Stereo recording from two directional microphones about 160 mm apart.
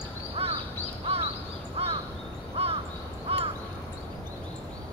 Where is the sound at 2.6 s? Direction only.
35° right (ahead or behind).